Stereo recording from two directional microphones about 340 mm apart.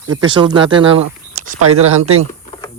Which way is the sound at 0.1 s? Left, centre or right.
Centre.